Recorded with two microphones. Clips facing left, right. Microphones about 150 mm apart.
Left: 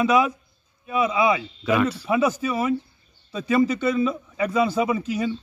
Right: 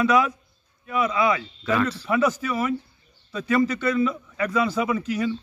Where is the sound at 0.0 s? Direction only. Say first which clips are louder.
Left 1 dB; 20° left (ahead or behind).